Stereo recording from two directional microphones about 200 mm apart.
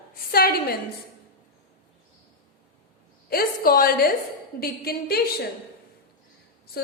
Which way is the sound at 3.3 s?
50° left (ahead or behind).